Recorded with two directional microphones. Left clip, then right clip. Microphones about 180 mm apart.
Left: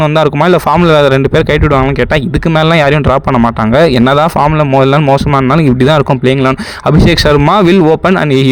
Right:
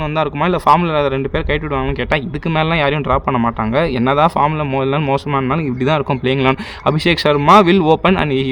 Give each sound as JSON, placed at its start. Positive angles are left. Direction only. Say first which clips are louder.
{"t": 0.2, "sound": "speech", "louder": "left 6 dB", "side_deg": 45}
{"t": 2.6, "sound": "speech", "louder": "left 7 dB", "side_deg": 40}
{"t": 6.2, "sound": "speech", "louder": "left 5 dB", "side_deg": 35}